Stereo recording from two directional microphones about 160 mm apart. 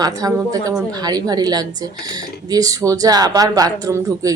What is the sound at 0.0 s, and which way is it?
Speech, 20° right (ahead or behind).